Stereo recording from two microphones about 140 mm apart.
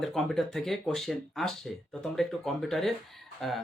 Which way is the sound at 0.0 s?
Centre (ahead or behind).